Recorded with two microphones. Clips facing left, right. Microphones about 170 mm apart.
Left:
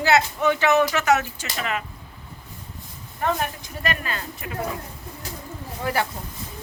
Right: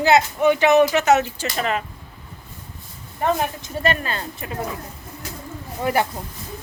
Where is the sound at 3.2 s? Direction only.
25° right (ahead or behind).